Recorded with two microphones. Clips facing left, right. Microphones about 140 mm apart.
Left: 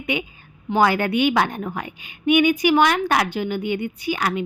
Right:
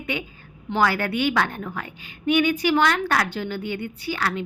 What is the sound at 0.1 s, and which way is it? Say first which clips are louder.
A woman's voice: left 4 dB; 15° left (ahead or behind).